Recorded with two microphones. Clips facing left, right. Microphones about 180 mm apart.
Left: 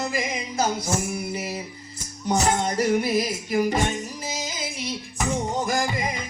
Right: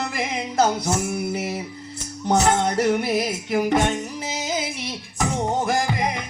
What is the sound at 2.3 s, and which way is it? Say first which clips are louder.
Music: right 3 dB; 65° right (ahead or behind).